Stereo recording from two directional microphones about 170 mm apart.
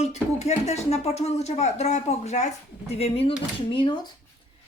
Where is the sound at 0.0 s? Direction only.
40° left (ahead or behind).